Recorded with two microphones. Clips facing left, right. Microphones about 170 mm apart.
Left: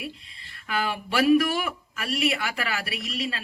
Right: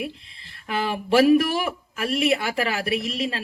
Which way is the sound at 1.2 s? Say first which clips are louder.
Right 1 dB; 35° right (ahead or behind).